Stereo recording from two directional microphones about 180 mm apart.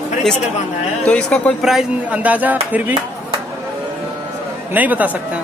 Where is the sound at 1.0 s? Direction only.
5° left (ahead or behind).